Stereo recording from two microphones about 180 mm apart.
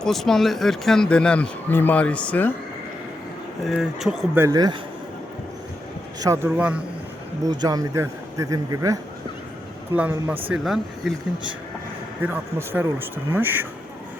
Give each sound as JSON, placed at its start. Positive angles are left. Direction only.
{"t": 0.0, "sound": "speech", "side_deg": 0}
{"t": 3.7, "sound": "speech", "side_deg": 0}
{"t": 4.4, "sound": "speech", "side_deg": -20}
{"t": 6.1, "sound": "speech", "side_deg": -15}
{"t": 7.4, "sound": "speech", "side_deg": -20}
{"t": 12.2, "sound": "speech", "side_deg": -10}